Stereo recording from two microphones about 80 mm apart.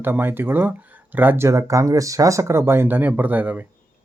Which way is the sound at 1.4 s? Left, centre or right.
Right.